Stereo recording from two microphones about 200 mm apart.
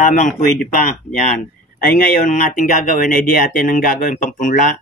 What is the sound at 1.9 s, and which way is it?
Speech, 45° left (ahead or behind).